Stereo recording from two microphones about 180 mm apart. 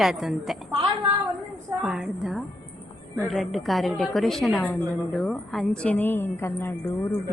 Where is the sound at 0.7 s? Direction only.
25° right (ahead or behind).